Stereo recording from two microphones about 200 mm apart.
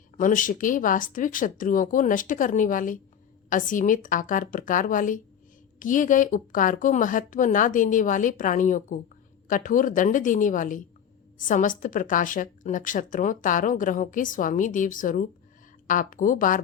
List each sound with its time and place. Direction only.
0.2 s a woman's voice: 40° left (ahead or behind)